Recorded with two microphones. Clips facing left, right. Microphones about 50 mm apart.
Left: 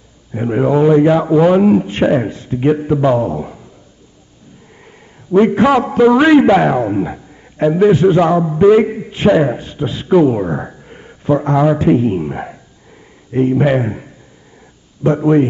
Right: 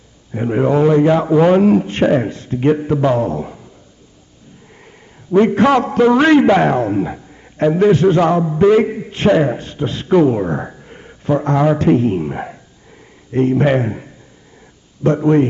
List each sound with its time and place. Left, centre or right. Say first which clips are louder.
0.3 s a man's voice: left 1 dB; centre
2.6 s a man's voice: left 1 dB; centre
3.2 s a man's voice: left 1 dB; centre
5.5 s a man's voice: left 1 dB; centre
7.9 s a man's voice: left 1 dB; centre
8.4 s a man's voice: left 2 dB; centre
10.0 s a sound: left 1 dB; centre
11.5 s a man's voice: left 1 dB; centre
15.1 s a man's voice: left 1 dB; centre